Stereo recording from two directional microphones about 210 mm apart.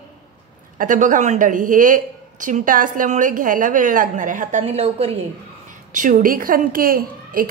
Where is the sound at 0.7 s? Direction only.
40° right (ahead or behind).